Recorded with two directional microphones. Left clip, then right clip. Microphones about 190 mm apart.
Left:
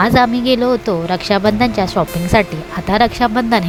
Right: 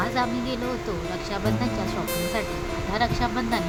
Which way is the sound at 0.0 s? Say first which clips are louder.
Left 13 dB; 50° left (ahead or behind).